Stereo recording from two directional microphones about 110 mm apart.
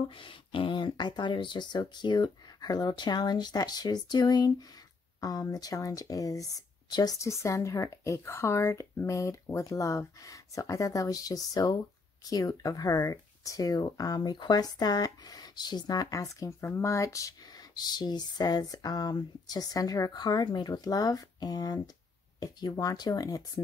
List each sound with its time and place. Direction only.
0.1 s speech: 50° left (ahead or behind); by 23.6 s 35° left (ahead or behind)